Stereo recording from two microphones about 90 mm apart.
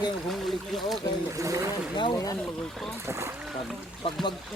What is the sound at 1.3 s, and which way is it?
Speech, 35° right (ahead or behind).